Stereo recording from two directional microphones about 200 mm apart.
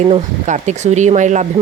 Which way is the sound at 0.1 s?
35° right (ahead or behind).